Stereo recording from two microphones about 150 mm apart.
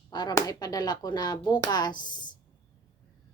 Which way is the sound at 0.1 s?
25° left (ahead or behind).